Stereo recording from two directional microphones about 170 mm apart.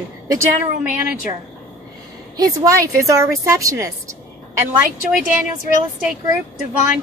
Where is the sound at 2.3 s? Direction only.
20° right (ahead or behind).